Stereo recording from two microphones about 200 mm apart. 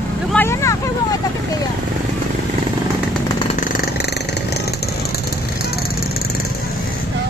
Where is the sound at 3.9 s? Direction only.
55° left (ahead or behind).